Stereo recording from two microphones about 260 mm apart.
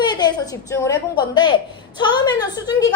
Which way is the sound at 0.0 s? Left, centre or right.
Centre.